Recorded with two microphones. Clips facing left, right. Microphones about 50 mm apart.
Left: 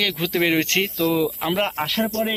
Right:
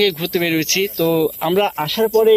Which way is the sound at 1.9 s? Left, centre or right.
Centre.